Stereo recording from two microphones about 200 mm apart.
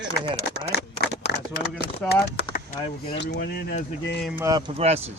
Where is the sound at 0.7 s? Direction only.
55° left (ahead or behind).